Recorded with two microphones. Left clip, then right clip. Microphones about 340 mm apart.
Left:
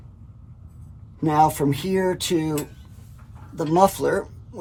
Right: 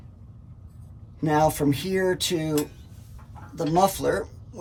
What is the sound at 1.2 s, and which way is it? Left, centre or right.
Speech, centre.